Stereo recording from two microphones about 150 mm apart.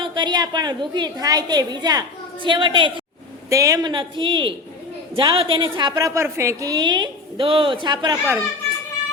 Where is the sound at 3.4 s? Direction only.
20° right (ahead or behind).